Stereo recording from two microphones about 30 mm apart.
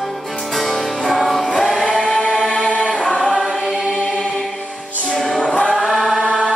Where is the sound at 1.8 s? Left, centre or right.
Left.